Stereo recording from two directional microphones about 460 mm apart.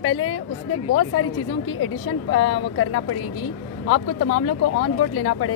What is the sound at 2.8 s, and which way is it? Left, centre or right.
Speech, left.